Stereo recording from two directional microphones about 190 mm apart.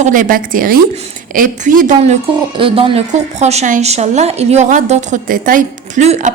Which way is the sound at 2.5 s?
30° right (ahead or behind).